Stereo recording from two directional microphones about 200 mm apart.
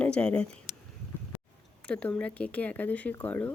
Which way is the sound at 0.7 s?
35° left (ahead or behind).